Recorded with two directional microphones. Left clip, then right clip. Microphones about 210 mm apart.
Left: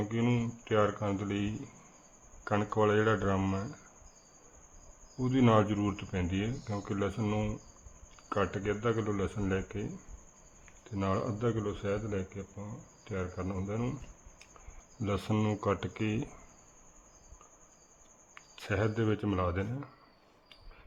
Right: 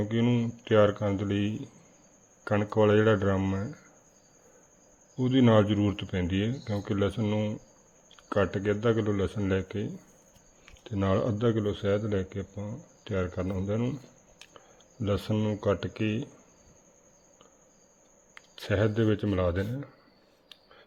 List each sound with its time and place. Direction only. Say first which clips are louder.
0.1 s speech: right 4 dB; 15° right (ahead or behind)
0.6 s speech: right 7 dB; 20° right (ahead or behind)
5.2 s speech: right 4 dB; 15° right (ahead or behind)
10.8 s speech: right 5 dB; 25° right (ahead or behind)
15.0 s speech: right 3 dB; 10° right (ahead or behind)
18.3 s speech: right 5 dB; 15° right (ahead or behind)